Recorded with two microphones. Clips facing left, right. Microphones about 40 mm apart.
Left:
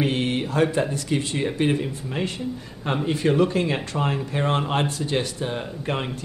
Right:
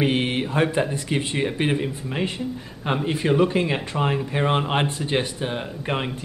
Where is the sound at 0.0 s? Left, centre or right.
Right.